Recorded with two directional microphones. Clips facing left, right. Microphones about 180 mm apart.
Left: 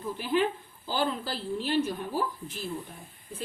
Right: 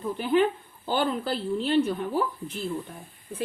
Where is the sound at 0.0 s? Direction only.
55° right (ahead or behind).